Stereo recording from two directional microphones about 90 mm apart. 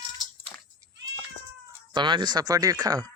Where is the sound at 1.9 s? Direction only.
55° right (ahead or behind).